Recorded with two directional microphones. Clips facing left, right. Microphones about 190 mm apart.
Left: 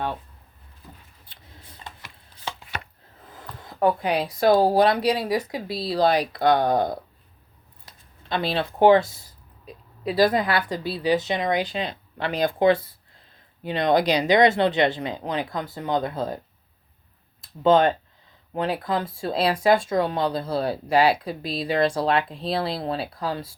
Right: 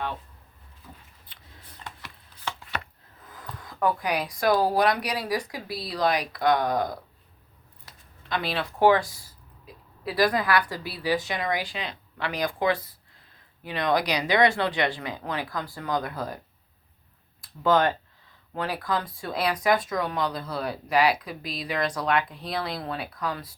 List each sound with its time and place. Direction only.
2.0 s chopping: 15° left (ahead or behind)
3.2 s speech: 25° left (ahead or behind)
17.4 s speech: 25° left (ahead or behind)